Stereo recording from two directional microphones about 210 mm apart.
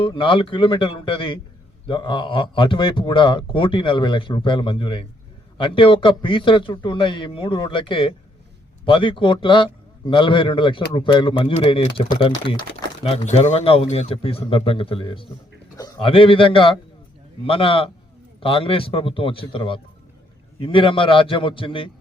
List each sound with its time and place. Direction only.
0.0 s speech: 25° left (ahead or behind)